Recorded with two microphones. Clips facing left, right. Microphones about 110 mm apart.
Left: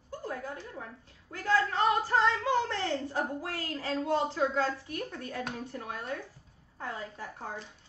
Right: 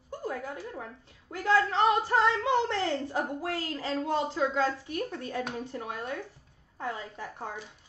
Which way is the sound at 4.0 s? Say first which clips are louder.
Even; 20° right (ahead or behind).